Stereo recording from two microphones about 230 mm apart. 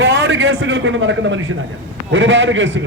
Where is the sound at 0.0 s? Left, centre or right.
Right.